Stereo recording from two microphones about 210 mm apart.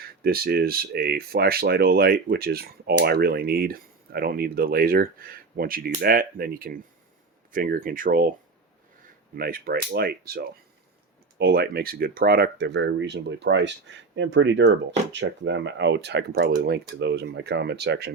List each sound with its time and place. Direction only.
0.2 s speech: 45° right (ahead or behind)
9.3 s speech: 45° right (ahead or behind)